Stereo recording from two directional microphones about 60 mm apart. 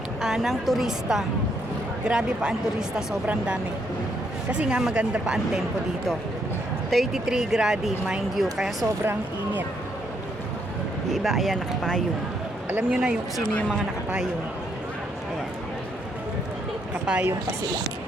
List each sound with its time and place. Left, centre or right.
0.2 s a woman's voice: centre
4.5 s speech: centre
6.9 s a woman's voice: centre
11.1 s a woman's voice: centre
12.9 s speech: centre
16.9 s a sound: right